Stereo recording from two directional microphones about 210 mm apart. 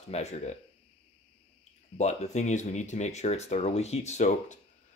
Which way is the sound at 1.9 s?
35° left (ahead or behind).